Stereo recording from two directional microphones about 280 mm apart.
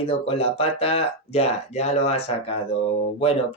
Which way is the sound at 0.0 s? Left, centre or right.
Centre.